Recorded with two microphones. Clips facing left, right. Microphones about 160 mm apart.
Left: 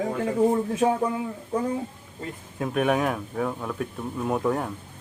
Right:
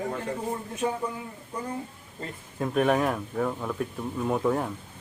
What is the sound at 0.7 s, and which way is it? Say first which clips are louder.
Speech: left 6 dB; 90° left.